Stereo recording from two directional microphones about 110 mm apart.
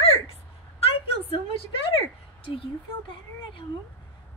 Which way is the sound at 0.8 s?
65° left (ahead or behind).